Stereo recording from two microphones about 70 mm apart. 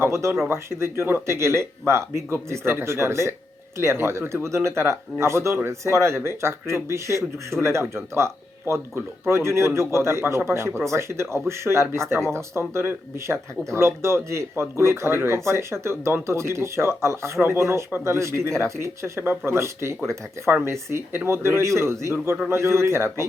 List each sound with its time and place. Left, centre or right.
0.0 s speech: right